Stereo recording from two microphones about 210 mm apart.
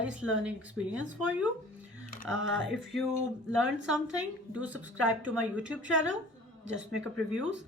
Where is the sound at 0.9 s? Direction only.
65° right (ahead or behind).